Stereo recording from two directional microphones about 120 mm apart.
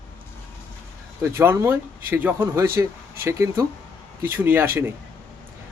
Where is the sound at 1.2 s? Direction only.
20° right (ahead or behind).